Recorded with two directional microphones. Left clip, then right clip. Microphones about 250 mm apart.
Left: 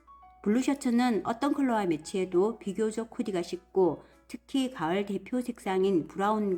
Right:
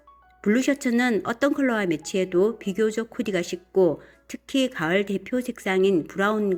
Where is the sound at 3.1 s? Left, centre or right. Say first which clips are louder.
Right 6 dB; centre.